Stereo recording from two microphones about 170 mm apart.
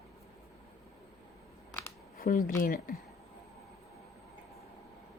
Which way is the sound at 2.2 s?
55° left (ahead or behind).